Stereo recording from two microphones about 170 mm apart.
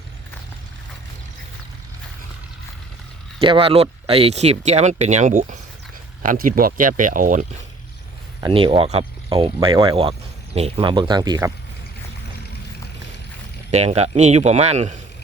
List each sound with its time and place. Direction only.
3.4 s speech: 30° right (ahead or behind)
6.2 s speech: 55° right (ahead or behind)
8.4 s speech: 30° right (ahead or behind)
13.7 s speech: 40° right (ahead or behind)